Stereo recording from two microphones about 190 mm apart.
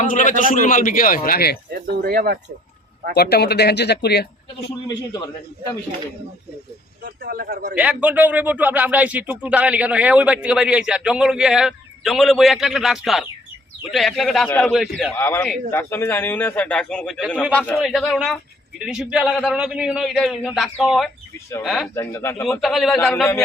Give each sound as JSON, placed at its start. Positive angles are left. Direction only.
{"t": 0.0, "sound": "a man's voice", "side_deg": 40}
{"t": 2.0, "sound": "a man's voice", "side_deg": -55}
{"t": 3.2, "sound": "speech", "side_deg": 60}
{"t": 4.9, "sound": "a man's voice", "side_deg": 20}
{"t": 7.0, "sound": "a man's voice", "side_deg": -50}
{"t": 7.8, "sound": "a man's voice", "side_deg": -5}
{"t": 15.1, "sound": "a man's voice", "side_deg": 15}
{"t": 21.9, "sound": "speech", "side_deg": 15}
{"t": 22.6, "sound": "a man's voice", "side_deg": 0}